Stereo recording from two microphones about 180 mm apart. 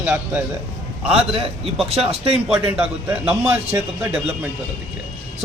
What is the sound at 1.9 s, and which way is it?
Speech, 30° right (ahead or behind).